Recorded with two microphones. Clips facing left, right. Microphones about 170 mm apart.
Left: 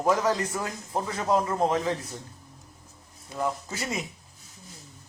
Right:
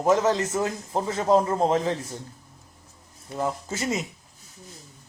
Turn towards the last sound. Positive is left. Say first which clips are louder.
# right 4 dB
turn(degrees=-25)  # may be behind; listen again after turning